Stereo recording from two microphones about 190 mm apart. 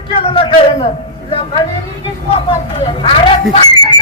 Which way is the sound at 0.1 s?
30° left (ahead or behind).